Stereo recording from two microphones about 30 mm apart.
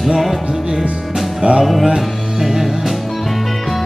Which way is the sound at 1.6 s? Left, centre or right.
Centre.